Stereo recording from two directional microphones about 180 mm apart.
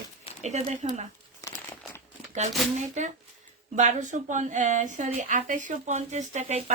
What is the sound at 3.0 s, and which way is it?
A woman's voice, 40° right (ahead or behind).